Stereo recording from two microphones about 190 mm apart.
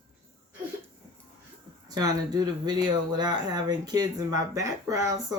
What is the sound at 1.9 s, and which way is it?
Speech, 20° right (ahead or behind).